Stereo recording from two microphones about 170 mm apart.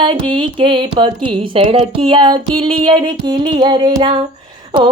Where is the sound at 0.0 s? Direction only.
30° right (ahead or behind).